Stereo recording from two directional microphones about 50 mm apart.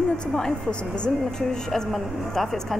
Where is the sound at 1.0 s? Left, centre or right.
Centre.